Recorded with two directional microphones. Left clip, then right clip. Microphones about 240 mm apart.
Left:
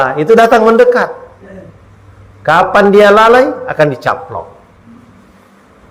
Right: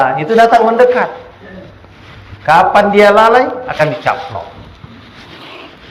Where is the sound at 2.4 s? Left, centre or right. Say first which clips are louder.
Even; left.